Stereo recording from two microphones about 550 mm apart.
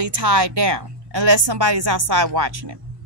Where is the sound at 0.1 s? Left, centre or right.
Right.